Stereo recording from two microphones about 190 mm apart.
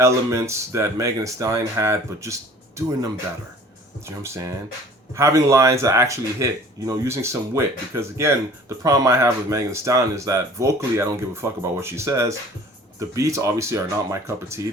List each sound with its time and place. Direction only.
0.0 s speech: 15° right (ahead or behind)
5.1 s speech: 15° right (ahead or behind)